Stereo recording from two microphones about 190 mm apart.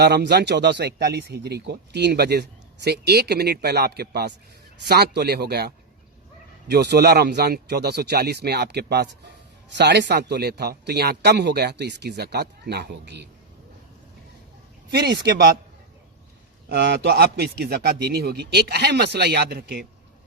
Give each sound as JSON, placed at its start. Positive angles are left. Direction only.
{"t": 0.0, "sound": "speech", "side_deg": -60}
{"t": 14.9, "sound": "speech", "side_deg": -60}
{"t": 16.6, "sound": "speech", "side_deg": -60}